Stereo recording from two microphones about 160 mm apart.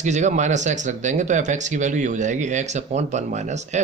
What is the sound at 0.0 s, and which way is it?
A man's voice, 45° right (ahead or behind).